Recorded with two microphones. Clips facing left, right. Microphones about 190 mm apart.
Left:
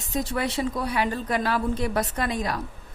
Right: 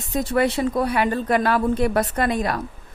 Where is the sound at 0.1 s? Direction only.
60° right (ahead or behind).